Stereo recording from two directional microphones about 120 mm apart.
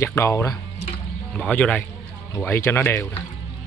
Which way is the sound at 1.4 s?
10° left (ahead or behind).